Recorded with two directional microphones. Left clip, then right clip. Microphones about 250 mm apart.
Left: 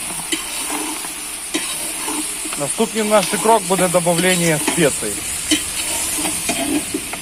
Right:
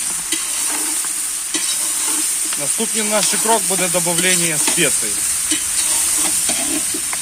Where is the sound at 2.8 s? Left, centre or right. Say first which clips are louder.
Left 4 dB; centre.